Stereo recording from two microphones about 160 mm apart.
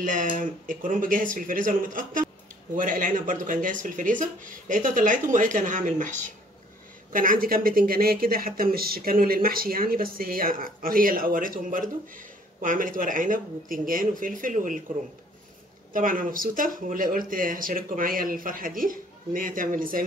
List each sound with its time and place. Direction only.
0.0 s speech: 55° right (ahead or behind)
15.9 s speech: 60° right (ahead or behind)